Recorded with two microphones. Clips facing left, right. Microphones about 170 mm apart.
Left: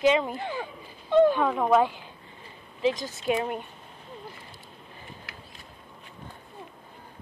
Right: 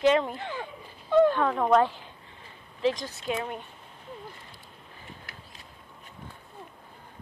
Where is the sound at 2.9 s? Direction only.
Centre (ahead or behind).